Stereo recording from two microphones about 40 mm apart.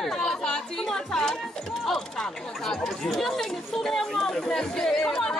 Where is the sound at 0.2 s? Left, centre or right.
Centre.